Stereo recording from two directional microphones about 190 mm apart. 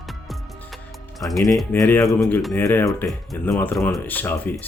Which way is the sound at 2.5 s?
10° left (ahead or behind).